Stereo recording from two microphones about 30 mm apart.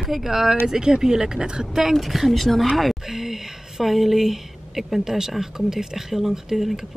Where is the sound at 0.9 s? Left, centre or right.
Right.